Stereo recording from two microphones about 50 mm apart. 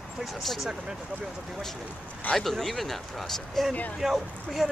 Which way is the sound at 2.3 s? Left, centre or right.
Centre.